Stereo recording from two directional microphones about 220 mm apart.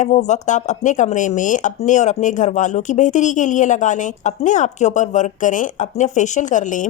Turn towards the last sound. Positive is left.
turn(degrees=35)  # may be behind; listen again after turning